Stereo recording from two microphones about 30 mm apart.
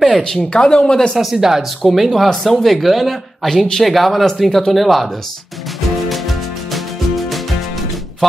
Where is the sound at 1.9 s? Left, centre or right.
Centre.